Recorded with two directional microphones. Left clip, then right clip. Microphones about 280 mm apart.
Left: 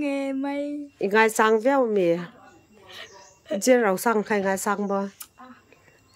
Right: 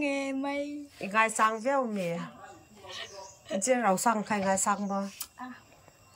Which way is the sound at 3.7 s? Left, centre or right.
Centre.